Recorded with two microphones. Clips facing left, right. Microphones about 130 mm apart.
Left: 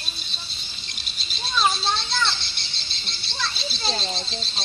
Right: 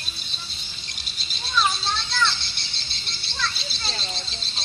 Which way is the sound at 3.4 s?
25° left (ahead or behind).